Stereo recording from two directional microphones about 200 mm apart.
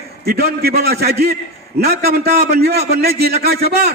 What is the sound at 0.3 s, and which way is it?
A man's voice, 50° right (ahead or behind).